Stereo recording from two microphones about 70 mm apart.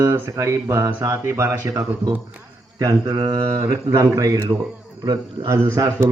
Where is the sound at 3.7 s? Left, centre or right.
Right.